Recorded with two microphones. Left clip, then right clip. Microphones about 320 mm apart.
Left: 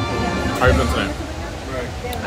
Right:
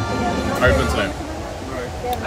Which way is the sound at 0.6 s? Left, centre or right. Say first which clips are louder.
Right 1 dB; centre.